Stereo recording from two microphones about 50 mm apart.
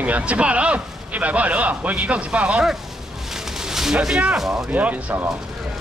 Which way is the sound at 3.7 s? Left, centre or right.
Centre.